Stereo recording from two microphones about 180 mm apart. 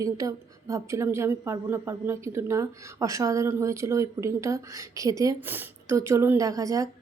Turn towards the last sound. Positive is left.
turn(degrees=-20)  # may be behind; listen again after turning